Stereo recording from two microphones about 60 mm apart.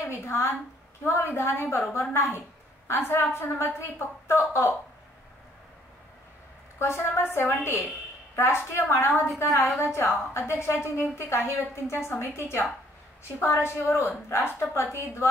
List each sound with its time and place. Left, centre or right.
0.0 s a woman's voice: left
6.8 s a woman's voice: left